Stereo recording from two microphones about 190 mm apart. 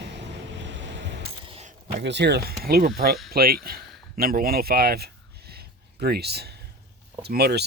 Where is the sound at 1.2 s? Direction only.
30° right (ahead or behind).